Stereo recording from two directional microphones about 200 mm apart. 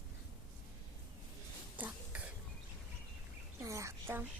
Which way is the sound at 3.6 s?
15° right (ahead or behind).